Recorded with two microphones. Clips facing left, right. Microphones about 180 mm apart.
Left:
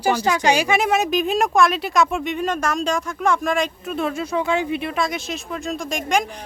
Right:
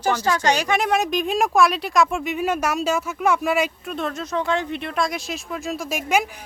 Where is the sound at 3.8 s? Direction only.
5° left (ahead or behind).